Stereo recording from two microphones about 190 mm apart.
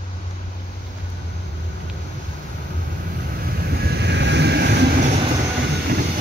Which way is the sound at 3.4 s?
55° right (ahead or behind).